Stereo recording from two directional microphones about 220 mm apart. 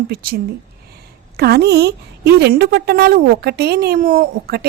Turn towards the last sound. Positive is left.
turn(degrees=-40)  # may be behind; listen again after turning